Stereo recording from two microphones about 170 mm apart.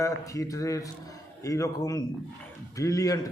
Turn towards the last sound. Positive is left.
turn(degrees=20)  # may be behind; listen again after turning